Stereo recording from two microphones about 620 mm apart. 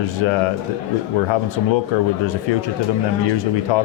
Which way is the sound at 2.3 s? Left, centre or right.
Left.